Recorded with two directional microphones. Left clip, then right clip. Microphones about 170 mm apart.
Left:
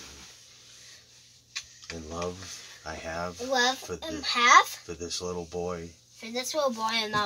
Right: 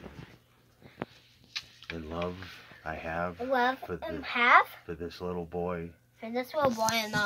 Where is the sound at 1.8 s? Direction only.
Centre (ahead or behind).